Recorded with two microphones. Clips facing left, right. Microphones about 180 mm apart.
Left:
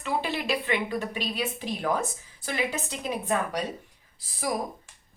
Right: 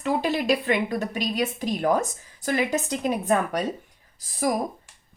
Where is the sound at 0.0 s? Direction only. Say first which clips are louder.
Right 5 dB; 40° right (ahead or behind).